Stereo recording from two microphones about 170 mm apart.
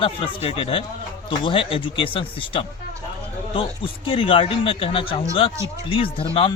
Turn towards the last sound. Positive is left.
turn(degrees=30)  # may be behind; listen again after turning